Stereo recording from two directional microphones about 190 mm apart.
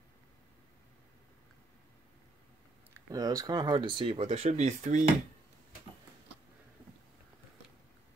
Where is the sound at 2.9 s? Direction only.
20° right (ahead or behind); by 5.1 s 40° right (ahead or behind).